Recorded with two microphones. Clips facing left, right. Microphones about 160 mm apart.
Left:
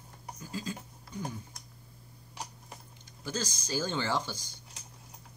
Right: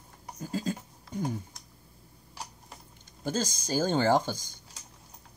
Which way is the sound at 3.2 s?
50° right (ahead or behind).